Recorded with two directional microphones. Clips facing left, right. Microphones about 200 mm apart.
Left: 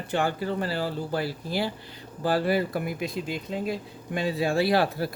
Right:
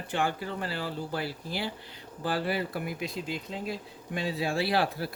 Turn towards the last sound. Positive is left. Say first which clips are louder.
# left 5 dB
turn(degrees=45)  # may be behind; listen again after turning